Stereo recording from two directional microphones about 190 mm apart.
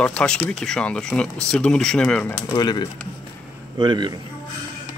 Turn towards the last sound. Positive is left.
turn(degrees=-25)  # may be behind; listen again after turning